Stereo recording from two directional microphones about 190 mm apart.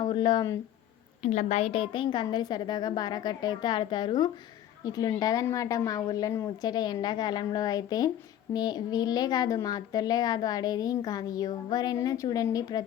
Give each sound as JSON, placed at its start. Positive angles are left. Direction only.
{"t": 0.0, "sound": "speech", "side_deg": 25}
{"t": 1.2, "sound": "a child's voice", "side_deg": 40}